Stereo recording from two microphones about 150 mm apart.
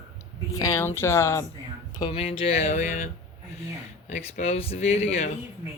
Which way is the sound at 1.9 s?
35° left (ahead or behind).